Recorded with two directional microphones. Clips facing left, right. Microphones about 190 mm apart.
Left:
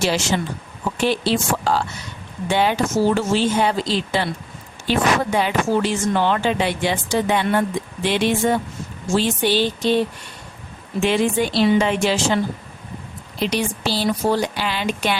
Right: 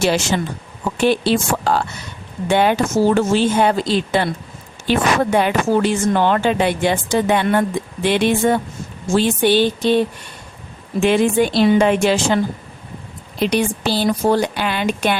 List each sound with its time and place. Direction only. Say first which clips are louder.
0.0 s speech: right 3 dB; 55° right (ahead or behind)
11.0 s speech: right 4 dB; 50° right (ahead or behind)
13.4 s speech: right 4 dB; 55° right (ahead or behind)